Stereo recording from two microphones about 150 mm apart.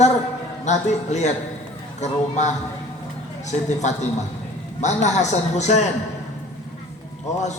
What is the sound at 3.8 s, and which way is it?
A man's voice, 50° left (ahead or behind).